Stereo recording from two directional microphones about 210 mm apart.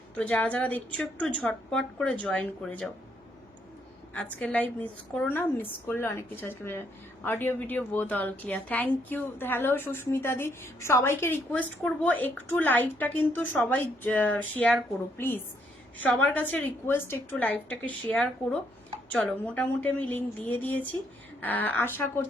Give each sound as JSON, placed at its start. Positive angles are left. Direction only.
{"t": 0.2, "sound": "a woman's voice", "side_deg": 5}
{"t": 4.1, "sound": "a woman's voice", "side_deg": 5}
{"t": 16.0, "sound": "a woman's voice", "side_deg": 5}